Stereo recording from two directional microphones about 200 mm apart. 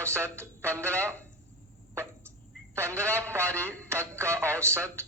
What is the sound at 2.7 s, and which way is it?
Speech, 15° right (ahead or behind).